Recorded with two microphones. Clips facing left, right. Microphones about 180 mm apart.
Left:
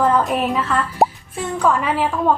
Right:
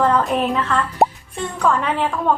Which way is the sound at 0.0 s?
5° left (ahead or behind).